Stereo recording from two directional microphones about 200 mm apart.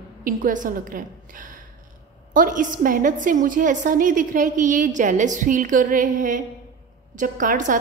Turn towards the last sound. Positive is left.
turn(degrees=-40)  # may be behind; listen again after turning